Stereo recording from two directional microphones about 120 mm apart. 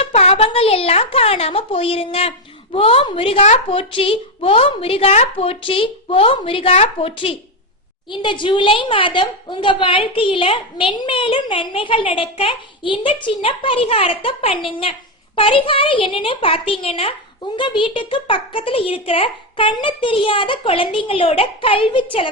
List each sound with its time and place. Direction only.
0.0 s a child's voice: 60° left (ahead or behind)
8.1 s a woman's voice: 40° left (ahead or behind)